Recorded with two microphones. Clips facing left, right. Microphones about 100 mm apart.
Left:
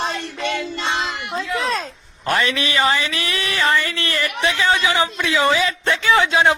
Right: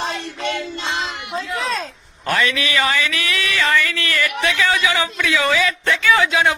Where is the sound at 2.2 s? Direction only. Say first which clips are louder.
Even; 30° left (ahead or behind).